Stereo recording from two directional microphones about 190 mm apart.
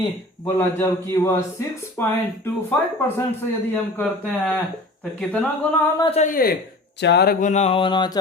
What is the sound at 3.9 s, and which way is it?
Speech, 5° left (ahead or behind).